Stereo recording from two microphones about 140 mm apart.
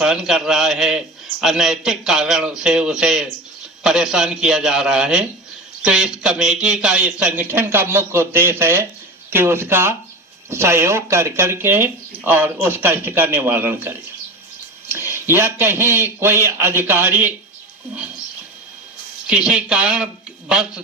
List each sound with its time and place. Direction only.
0.0 s a man's voice: 5° right (ahead or behind)
19.3 s a man's voice: 5° right (ahead or behind)